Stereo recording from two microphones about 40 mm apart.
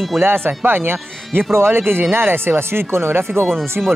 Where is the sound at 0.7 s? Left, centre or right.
Right.